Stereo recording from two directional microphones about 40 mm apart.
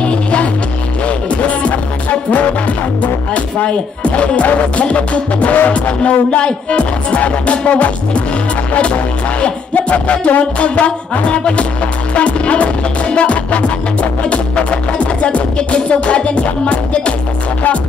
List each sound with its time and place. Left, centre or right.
0.0 s music: left
3.0 s speech: left
5.7 s music: left